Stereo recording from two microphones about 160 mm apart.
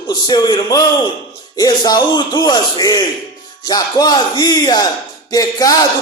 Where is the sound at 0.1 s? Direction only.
25° left (ahead or behind).